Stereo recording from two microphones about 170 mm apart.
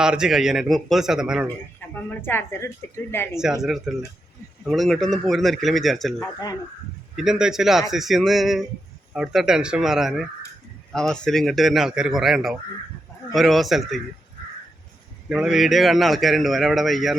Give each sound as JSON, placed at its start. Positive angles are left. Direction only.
{"t": 0.0, "sound": "a man's voice", "side_deg": -5}
{"t": 1.8, "sound": "a sound", "side_deg": 15}
{"t": 2.2, "sound": "a woman's voice", "side_deg": 15}
{"t": 3.4, "sound": "a man's voice", "side_deg": 0}
{"t": 6.1, "sound": "speech", "side_deg": 20}
{"t": 7.2, "sound": "a man's voice", "side_deg": -5}
{"t": 15.3, "sound": "a man's voice", "side_deg": -5}